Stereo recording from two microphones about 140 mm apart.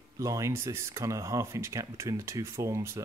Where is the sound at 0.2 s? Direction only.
20° right (ahead or behind).